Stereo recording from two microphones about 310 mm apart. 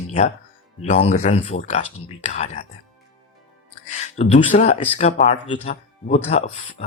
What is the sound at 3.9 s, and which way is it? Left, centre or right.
Speech, left.